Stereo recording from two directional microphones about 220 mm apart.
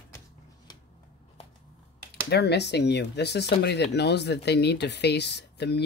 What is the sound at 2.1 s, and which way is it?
Speech, 50° left (ahead or behind).